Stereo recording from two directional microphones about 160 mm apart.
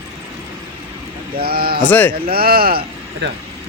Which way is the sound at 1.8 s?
10° left (ahead or behind).